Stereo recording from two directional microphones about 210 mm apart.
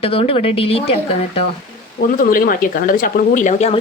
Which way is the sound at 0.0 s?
25° left (ahead or behind).